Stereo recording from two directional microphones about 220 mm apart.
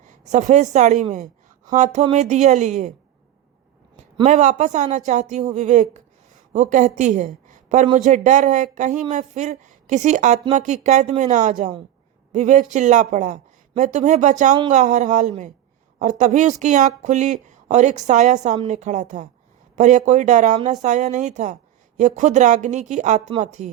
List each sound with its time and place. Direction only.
0.0 s a woman's voice: 35° right (ahead or behind)
4.2 s a woman's voice: 30° right (ahead or behind)